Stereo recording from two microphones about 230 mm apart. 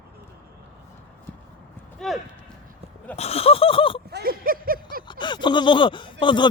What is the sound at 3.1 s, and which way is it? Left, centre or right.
Speech, left.